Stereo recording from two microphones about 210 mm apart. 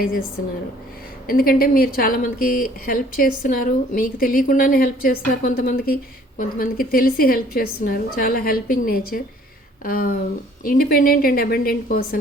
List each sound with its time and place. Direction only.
1.3 s a woman's voice: 45° left (ahead or behind)